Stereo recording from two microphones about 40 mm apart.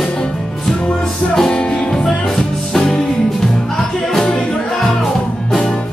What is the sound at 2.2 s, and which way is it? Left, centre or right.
Music, centre.